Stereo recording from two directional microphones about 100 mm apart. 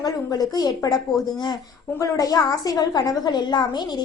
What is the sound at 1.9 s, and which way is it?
A woman's voice, 35° left (ahead or behind).